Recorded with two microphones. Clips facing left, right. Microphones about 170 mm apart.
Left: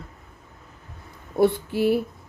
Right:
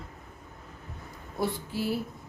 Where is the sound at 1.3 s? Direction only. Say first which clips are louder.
Left 11 dB; 60° left (ahead or behind).